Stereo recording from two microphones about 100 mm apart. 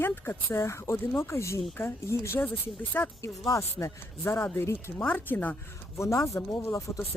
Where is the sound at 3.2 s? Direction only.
30° left (ahead or behind).